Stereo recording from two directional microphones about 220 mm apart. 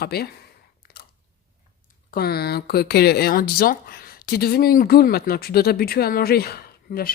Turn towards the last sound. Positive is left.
turn(degrees=45)  # may be behind; listen again after turning